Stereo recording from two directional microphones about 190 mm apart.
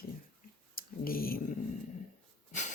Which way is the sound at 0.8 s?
50° left (ahead or behind).